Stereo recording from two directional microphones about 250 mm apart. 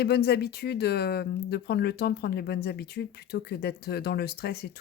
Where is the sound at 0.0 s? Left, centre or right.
Left.